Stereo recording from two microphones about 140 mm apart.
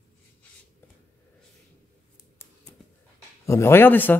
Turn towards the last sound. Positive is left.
turn(degrees=15)  # may be behind; listen again after turning